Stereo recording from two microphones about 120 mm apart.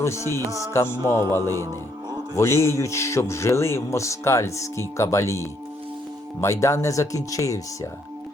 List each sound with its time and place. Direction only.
0.0 s a man's voice: 25° left (ahead or behind)
1.4 s speech: 30° right (ahead or behind)
2.3 s a man's voice: 25° left (ahead or behind)